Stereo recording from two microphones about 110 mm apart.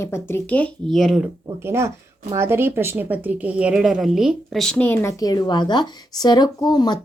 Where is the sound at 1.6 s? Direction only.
25° right (ahead or behind); by 5.0 s 10° left (ahead or behind).